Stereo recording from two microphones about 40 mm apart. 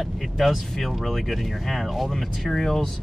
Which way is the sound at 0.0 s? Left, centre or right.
Centre.